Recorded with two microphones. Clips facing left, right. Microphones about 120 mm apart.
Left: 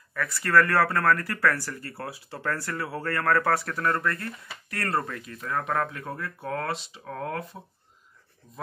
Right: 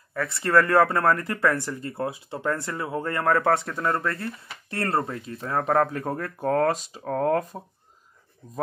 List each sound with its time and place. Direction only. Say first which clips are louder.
0.1 s speech: right 2 dB; 25° right (ahead or behind); by 7.5 s 45° right (ahead or behind)